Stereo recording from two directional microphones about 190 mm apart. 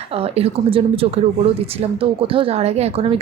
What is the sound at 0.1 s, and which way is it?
A woman's voice, 30° right (ahead or behind).